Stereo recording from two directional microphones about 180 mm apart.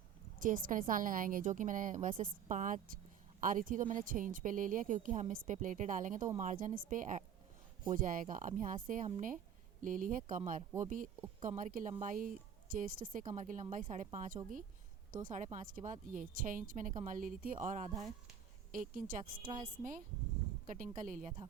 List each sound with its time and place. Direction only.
0.3 s a woman's voice: 50° right (ahead or behind)
20.7 s a woman's voice: 45° right (ahead or behind)